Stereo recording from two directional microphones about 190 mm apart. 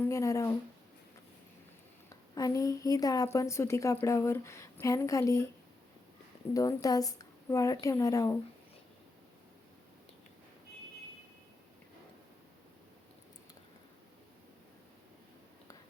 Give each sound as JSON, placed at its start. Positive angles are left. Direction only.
{"t": 0.0, "sound": "a sound", "side_deg": 15}
{"t": 2.3, "sound": "a woman's voice", "side_deg": 20}
{"t": 6.5, "sound": "a woman's voice", "side_deg": 15}